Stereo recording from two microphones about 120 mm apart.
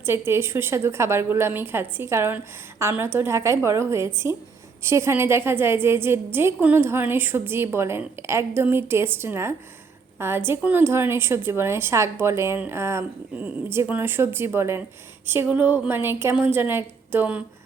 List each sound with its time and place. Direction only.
0.0 s a woman's voice: 20° right (ahead or behind)